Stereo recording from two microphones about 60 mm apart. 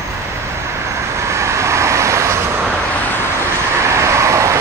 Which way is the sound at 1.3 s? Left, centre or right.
Right.